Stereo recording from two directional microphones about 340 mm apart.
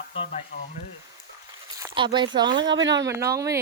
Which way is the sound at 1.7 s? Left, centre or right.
Centre.